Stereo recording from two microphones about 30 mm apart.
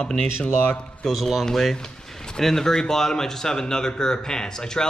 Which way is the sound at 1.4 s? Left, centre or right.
Centre.